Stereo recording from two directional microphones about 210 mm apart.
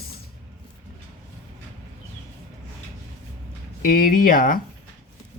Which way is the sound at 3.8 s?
40° left (ahead or behind).